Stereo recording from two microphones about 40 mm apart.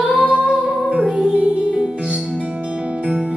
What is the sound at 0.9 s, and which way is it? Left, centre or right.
Music, right.